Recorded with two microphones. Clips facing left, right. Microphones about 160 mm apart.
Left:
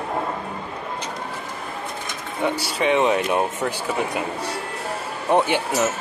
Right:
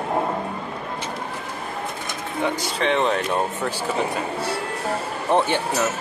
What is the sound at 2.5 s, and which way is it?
Speech, 10° left (ahead or behind).